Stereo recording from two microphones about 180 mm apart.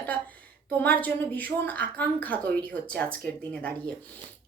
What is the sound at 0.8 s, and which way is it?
A woman's voice, 10° left (ahead or behind).